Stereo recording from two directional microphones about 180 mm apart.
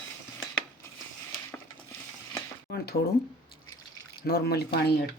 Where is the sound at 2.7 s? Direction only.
55° left (ahead or behind).